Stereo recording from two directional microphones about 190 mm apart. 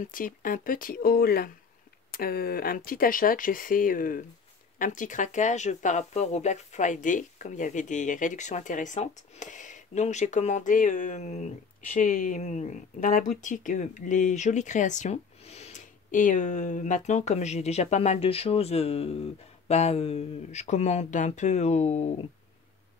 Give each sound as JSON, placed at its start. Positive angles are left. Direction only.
{"t": 0.0, "sound": "speech", "side_deg": 45}